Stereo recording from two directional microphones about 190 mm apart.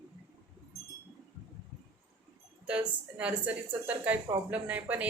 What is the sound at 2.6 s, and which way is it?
Speech, 5° right (ahead or behind).